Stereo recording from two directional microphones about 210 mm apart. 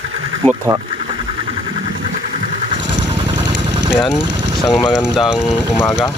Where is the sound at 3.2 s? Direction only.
20° right (ahead or behind).